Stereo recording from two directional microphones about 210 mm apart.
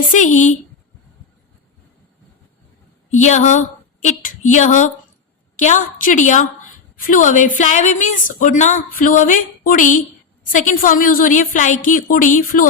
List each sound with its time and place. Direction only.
0.1 s a woman's voice: 35° left (ahead or behind)
3.1 s a woman's voice: 35° left (ahead or behind)